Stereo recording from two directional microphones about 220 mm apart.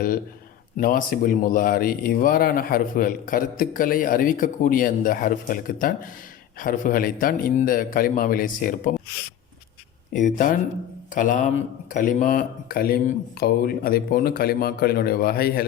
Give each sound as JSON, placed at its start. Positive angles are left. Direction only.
{"t": 0.8, "sound": "speech", "side_deg": 40}
{"t": 10.1, "sound": "speech", "side_deg": 35}